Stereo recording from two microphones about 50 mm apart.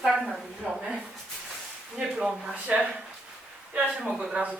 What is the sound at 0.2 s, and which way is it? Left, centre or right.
Speech, centre.